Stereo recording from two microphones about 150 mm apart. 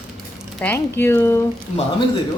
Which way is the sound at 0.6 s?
15° left (ahead or behind).